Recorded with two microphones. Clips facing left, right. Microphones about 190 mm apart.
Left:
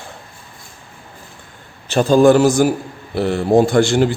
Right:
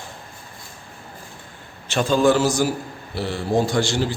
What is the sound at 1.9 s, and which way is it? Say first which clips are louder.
A man's voice: left 7 dB; 40° left (ahead or behind).